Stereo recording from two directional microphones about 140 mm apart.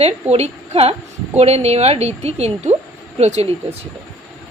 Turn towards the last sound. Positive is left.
turn(degrees=-50)  # may be behind; listen again after turning